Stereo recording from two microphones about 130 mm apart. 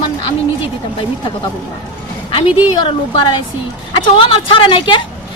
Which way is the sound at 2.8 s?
35° left (ahead or behind).